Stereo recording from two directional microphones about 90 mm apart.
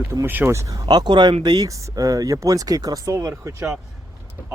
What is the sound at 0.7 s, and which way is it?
Speech, 50° right (ahead or behind).